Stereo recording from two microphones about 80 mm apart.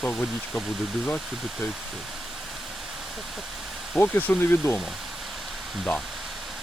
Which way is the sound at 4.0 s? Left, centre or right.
Left.